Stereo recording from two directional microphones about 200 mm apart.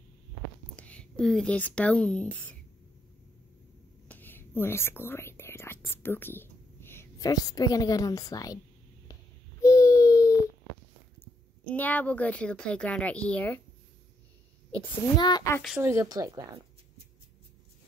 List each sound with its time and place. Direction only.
0.7 s speech: 5° left (ahead or behind)
4.1 s speech: 10° left (ahead or behind)
9.6 s a sound: 15° left (ahead or behind)
11.7 s speech: 10° left (ahead or behind)
15.1 s a woman's voice: 20° left (ahead or behind)
15.8 s speech: 15° right (ahead or behind)